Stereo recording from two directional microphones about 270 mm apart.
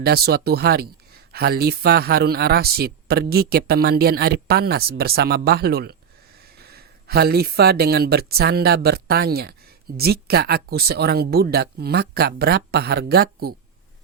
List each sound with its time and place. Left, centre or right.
0.0 s speech: right